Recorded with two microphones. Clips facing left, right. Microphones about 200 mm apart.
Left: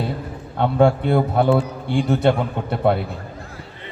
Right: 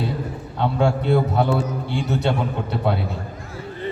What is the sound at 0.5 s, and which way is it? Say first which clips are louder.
A man's voice: left 4 dB; 55° left (ahead or behind).